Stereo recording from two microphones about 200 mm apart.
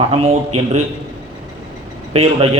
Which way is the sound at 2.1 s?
30° right (ahead or behind).